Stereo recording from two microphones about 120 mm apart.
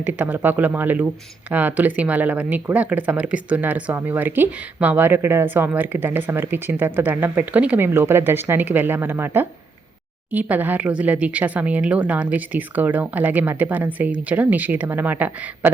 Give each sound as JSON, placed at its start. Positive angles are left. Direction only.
{"t": 0.0, "sound": "speech", "side_deg": -15}